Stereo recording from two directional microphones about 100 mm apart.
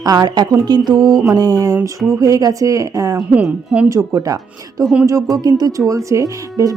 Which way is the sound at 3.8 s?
35° right (ahead or behind).